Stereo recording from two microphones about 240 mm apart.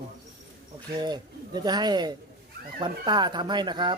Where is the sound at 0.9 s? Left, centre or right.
Centre.